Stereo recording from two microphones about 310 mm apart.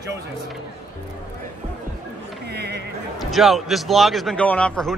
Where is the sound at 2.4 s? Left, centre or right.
Right.